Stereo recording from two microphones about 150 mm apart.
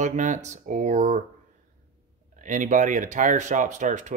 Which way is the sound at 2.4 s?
60° right (ahead or behind).